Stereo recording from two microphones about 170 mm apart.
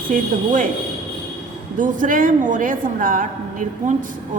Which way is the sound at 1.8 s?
50° right (ahead or behind).